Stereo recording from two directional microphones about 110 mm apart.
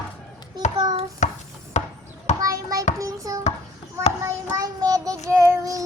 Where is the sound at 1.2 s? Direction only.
90° left.